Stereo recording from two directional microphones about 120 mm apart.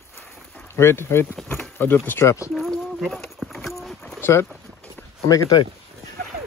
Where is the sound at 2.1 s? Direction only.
20° left (ahead or behind).